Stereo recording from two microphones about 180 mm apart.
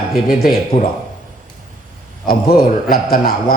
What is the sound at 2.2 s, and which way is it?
A man's voice, 55° left (ahead or behind).